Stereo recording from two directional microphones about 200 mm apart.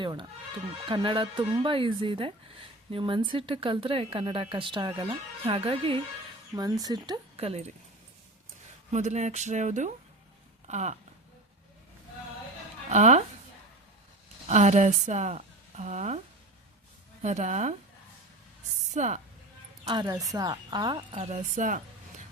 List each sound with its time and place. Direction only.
0.0 s a woman's voice: 25° right (ahead or behind)
8.9 s speech: 35° right (ahead or behind)
12.9 s speech: 35° right (ahead or behind)
14.4 s speech: 35° right (ahead or behind)
17.2 s speech: 35° right (ahead or behind)
18.9 s speech: 35° right (ahead or behind)
19.8 s a woman's voice: 20° right (ahead or behind)
21.2 s speech: 35° right (ahead or behind)